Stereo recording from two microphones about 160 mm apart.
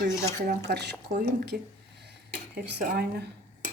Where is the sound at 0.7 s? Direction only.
90° right.